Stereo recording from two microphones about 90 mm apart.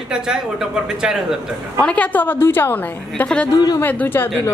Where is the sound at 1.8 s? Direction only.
15° left (ahead or behind).